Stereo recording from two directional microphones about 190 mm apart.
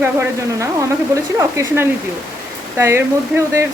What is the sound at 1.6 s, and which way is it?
Speech, 15° right (ahead or behind).